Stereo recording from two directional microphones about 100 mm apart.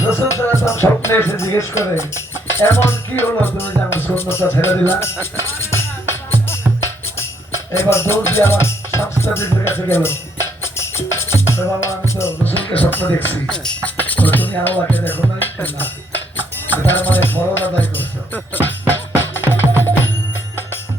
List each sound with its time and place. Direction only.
0.0 s music: 25° left (ahead or behind)
7.7 s music: 25° left (ahead or behind)